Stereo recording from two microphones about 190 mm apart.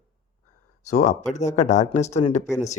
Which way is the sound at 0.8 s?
40° left (ahead or behind).